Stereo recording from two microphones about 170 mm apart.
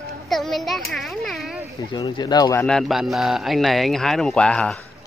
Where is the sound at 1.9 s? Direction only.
25° left (ahead or behind).